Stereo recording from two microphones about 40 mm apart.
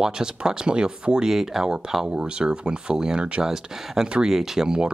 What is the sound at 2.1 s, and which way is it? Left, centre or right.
Speech, right.